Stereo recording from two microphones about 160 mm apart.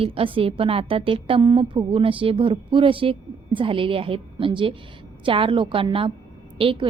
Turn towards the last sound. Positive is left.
turn(degrees=-35)  # may be behind; listen again after turning